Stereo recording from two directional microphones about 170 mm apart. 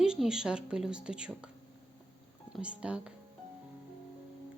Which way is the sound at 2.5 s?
5° right (ahead or behind).